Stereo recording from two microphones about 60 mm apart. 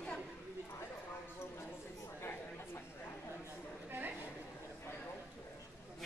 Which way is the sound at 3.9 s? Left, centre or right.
Right.